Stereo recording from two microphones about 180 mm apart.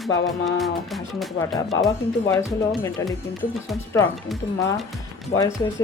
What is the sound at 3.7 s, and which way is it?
Music, centre (ahead or behind).